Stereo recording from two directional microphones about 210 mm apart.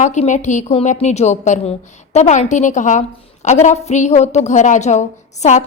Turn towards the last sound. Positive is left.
turn(degrees=35)  # may be behind; listen again after turning